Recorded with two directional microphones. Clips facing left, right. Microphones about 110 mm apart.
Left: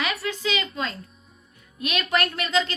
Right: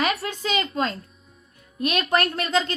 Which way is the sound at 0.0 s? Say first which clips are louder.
Right 2 dB; 45° right (ahead or behind).